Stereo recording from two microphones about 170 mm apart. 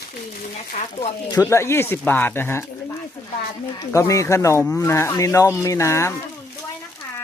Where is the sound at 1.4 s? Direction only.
15° left (ahead or behind).